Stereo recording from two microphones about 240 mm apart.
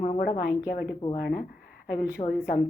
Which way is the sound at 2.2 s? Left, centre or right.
Left.